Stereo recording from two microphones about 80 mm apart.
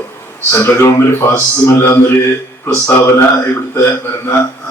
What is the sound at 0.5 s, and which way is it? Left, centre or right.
A man's voice, left.